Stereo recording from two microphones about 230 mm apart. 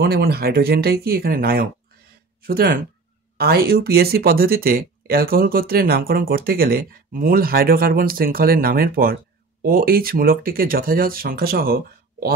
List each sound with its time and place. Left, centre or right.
0.0 s speech: right